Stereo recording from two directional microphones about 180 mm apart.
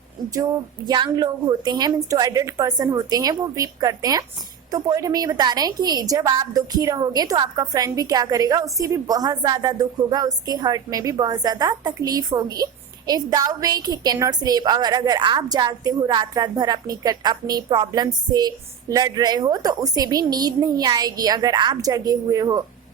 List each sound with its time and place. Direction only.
0.9 s a woman's voice: 25° right (ahead or behind)